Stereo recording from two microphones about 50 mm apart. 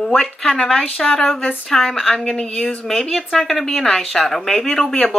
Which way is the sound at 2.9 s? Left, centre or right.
Centre.